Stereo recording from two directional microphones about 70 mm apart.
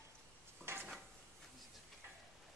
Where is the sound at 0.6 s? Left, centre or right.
Right.